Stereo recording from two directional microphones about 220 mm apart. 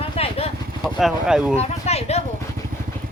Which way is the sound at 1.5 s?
30° left (ahead or behind).